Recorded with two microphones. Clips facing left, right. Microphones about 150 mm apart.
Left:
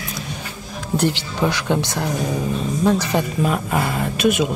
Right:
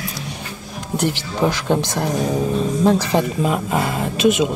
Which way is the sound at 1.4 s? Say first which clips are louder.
Right 2 dB; 20° right (ahead or behind).